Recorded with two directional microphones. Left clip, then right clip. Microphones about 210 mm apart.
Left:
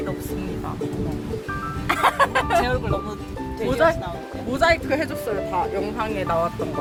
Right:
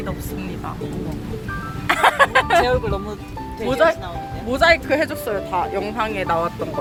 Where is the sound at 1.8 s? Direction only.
Centre (ahead or behind).